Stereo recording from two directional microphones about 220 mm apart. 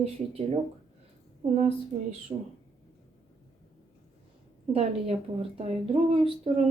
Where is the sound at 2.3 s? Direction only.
30° right (ahead or behind).